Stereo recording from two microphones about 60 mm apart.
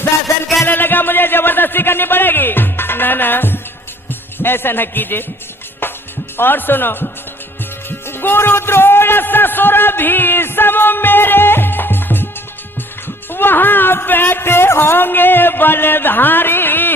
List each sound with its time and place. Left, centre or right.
0.7 s a sound: left
4.4 s speech: left
5.8 s music: left
6.3 s a man's voice: left
13.3 s speech: left